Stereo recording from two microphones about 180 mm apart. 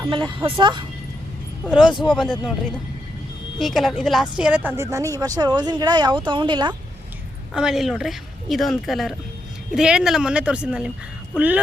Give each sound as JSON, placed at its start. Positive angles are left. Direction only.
{"t": 0.0, "sound": "a woman's voice", "side_deg": -25}
{"t": 2.0, "sound": "speech", "side_deg": -5}
{"t": 3.6, "sound": "a woman's voice", "side_deg": 0}
{"t": 7.5, "sound": "speech", "side_deg": -5}